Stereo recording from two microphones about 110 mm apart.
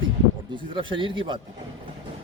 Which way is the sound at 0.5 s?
50° right (ahead or behind).